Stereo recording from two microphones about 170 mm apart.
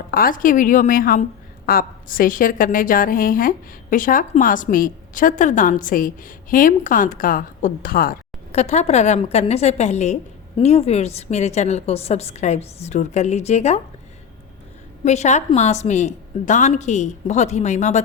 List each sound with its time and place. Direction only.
0.1 s a woman's voice: 55° left (ahead or behind)
8.5 s a woman's voice: 40° left (ahead or behind)
15.0 s a woman's voice: 40° left (ahead or behind)